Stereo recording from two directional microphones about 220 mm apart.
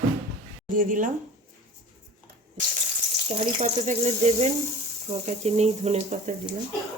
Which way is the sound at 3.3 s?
30° right (ahead or behind).